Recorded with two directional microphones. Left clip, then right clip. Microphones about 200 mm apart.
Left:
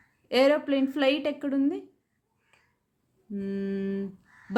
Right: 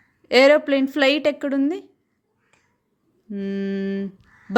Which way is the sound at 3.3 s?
30° right (ahead or behind).